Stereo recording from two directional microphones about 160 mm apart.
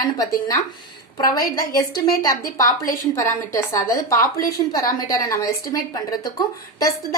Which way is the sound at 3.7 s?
20° left (ahead or behind).